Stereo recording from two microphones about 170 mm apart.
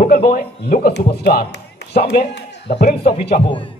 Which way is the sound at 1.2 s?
65° left (ahead or behind).